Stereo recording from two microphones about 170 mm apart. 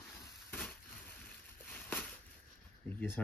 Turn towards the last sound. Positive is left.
turn(degrees=10)  # may be behind; listen again after turning